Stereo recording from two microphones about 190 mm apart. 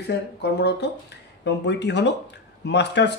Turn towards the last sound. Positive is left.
turn(degrees=65)  # may be behind; listen again after turning